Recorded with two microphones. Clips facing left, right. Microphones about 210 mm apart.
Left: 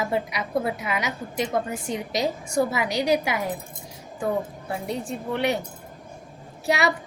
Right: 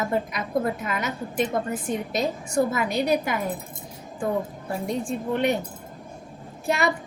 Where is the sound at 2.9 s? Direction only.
90° left.